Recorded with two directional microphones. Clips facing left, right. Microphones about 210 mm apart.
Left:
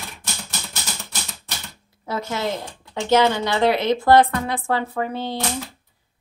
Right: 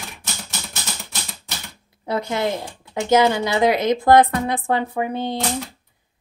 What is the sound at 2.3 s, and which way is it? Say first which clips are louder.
Speech: right 3 dB; 15° right (ahead or behind).